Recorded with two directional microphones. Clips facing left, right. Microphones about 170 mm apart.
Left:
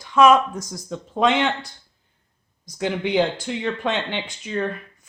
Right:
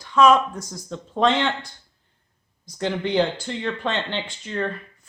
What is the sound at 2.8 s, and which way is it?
Speech, 10° left (ahead or behind).